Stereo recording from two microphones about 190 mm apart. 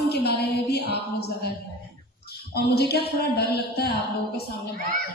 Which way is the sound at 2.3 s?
55° left (ahead or behind).